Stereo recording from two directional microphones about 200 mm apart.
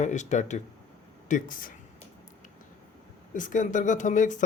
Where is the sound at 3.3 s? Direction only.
40° left (ahead or behind).